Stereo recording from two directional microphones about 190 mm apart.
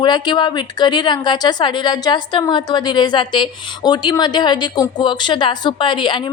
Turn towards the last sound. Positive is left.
turn(degrees=25)  # may be behind; listen again after turning